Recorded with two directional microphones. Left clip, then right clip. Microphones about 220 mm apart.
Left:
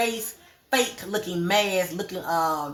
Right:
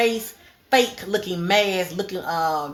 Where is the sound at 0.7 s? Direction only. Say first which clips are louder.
Right 5 dB; 25° right (ahead or behind).